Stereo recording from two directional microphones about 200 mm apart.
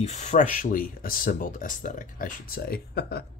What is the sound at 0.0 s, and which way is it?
Speech, 35° left (ahead or behind).